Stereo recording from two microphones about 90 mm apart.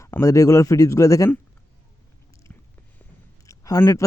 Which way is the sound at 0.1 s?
35° left (ahead or behind).